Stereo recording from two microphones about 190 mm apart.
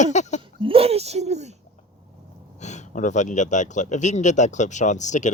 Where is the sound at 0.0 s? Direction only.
40° left (ahead or behind).